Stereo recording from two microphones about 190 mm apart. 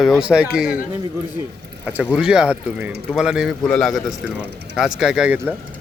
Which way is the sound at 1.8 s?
5° right (ahead or behind).